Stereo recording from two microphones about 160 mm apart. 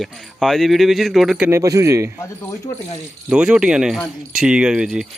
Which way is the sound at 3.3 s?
5° right (ahead or behind).